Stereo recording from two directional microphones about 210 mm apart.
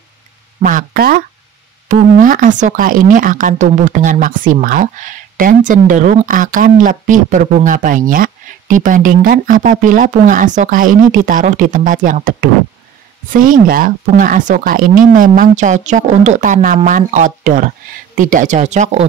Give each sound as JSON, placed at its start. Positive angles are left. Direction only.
{"t": 0.6, "sound": "speech", "side_deg": -40}